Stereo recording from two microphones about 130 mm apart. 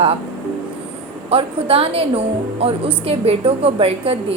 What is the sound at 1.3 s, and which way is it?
Speech, 45° right (ahead or behind).